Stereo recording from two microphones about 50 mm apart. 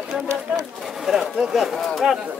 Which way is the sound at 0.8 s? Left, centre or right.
Centre.